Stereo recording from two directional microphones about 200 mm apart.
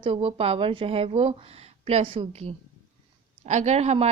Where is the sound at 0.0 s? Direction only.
30° right (ahead or behind).